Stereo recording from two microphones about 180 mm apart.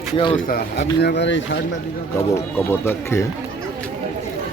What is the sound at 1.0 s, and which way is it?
Speech, 70° left (ahead or behind).